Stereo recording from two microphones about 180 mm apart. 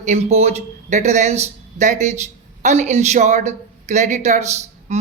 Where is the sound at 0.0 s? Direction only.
40° right (ahead or behind).